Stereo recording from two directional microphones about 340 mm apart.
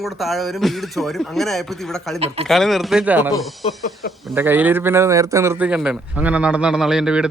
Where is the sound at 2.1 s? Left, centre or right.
Centre.